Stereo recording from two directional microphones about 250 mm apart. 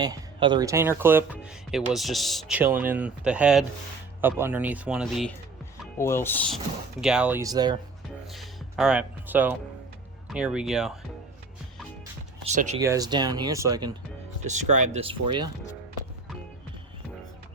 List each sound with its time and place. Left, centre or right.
0.0 s speech: centre
6.0 s speech: centre
8.3 s speech: centre
12.4 s speech: right
12.8 s speech: centre
14.4 s speech: right